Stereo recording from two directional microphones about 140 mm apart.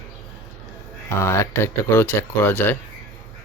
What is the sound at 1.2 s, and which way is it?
Speech, 20° left (ahead or behind).